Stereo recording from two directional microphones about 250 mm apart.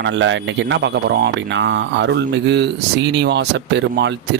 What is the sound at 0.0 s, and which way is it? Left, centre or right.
Speech, right.